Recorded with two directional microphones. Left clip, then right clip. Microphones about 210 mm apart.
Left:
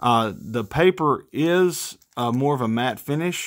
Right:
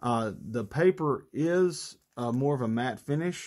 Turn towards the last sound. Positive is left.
turn(degrees=30)  # may be behind; listen again after turning